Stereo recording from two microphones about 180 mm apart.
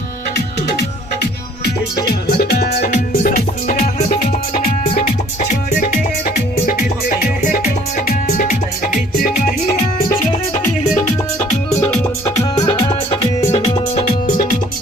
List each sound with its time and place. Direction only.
2.2 s music: 60° left (ahead or behind)
2.9 s music: 55° left (ahead or behind)
6.0 s music: 50° left (ahead or behind)
12.4 s music: 20° left (ahead or behind)